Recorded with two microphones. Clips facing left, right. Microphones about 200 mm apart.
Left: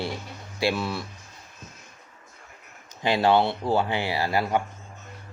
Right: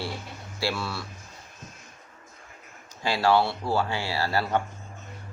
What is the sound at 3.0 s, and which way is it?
Speech, 20° left (ahead or behind).